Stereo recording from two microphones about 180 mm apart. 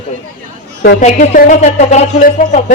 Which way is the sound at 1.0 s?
45° left (ahead or behind).